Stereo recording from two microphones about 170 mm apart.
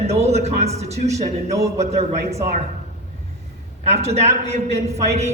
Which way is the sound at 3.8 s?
40° right (ahead or behind).